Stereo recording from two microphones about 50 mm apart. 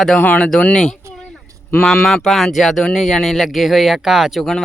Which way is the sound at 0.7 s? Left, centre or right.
Centre.